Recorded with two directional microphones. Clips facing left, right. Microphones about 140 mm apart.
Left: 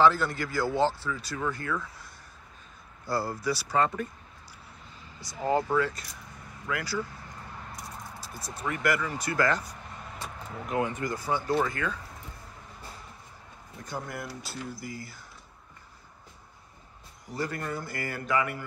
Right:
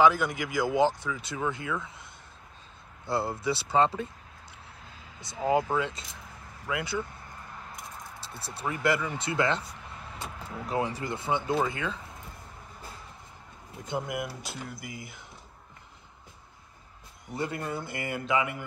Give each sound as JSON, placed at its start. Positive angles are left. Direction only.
{"t": 0.0, "sound": "speech", "side_deg": -15}
{"t": 3.1, "sound": "a man's voice", "side_deg": -25}
{"t": 5.5, "sound": "a man's voice", "side_deg": -20}
{"t": 10.7, "sound": "a man's voice", "side_deg": -30}
{"t": 13.8, "sound": "speech", "side_deg": -20}
{"t": 17.3, "sound": "a man's voice", "side_deg": -25}